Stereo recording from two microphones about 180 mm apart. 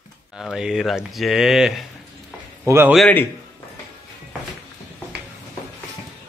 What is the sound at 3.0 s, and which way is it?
Speech, 5° left (ahead or behind).